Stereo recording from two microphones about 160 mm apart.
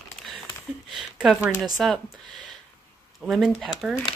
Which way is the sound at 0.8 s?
Centre (ahead or behind).